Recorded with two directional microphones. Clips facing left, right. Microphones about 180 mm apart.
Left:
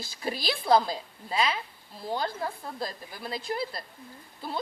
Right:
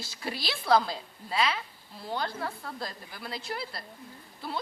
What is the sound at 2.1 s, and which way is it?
Speech, 20° left (ahead or behind).